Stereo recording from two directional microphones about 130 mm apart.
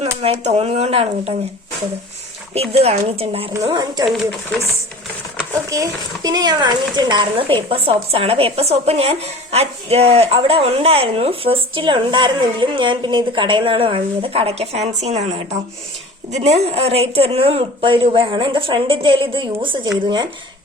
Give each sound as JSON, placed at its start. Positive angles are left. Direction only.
{"t": 0.0, "sound": "speech", "side_deg": -55}
{"t": 2.6, "sound": "speech", "side_deg": -55}
{"t": 3.7, "sound": "speech", "side_deg": -35}
{"t": 5.7, "sound": "speech", "side_deg": -30}